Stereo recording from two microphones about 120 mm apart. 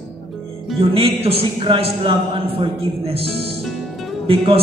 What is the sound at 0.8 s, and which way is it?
A man's voice, 50° right (ahead or behind).